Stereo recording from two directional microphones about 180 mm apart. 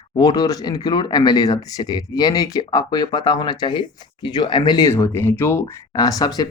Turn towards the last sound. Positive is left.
turn(degrees=20)  # may be behind; listen again after turning